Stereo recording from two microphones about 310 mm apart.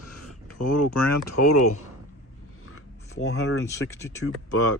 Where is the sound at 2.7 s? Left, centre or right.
Left.